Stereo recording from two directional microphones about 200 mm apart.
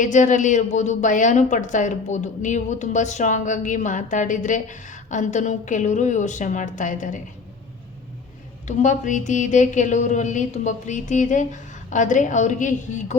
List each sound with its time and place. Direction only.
0.0 s a woman's voice: 40° left (ahead or behind)
8.6 s a woman's voice: 40° left (ahead or behind)